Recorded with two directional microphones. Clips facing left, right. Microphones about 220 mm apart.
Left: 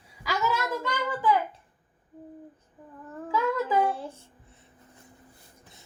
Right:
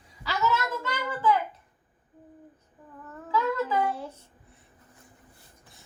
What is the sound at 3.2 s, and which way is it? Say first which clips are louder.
Humming: even; 15° left (ahead or behind).